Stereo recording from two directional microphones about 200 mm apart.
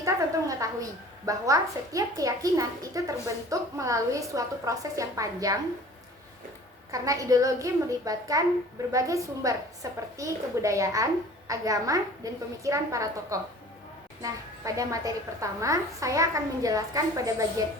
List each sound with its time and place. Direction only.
0.0 s speech: 15° right (ahead or behind)
6.9 s speech: 15° right (ahead or behind)